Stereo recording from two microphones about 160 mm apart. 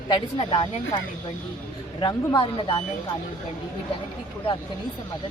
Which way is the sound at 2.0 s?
20° left (ahead or behind).